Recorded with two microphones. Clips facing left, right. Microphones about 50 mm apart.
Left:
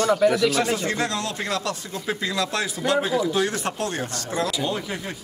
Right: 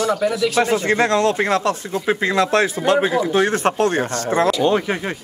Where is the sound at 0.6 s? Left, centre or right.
Right.